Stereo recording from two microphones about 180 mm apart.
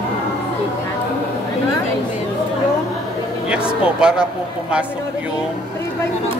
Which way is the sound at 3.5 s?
5° right (ahead or behind).